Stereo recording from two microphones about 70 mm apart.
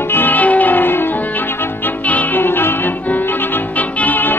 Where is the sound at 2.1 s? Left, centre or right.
Left.